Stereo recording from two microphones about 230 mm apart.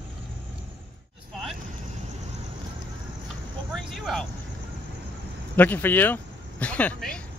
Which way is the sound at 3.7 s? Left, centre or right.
Centre.